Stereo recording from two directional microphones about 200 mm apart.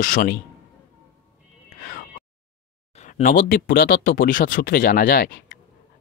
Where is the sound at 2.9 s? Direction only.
40° left (ahead or behind).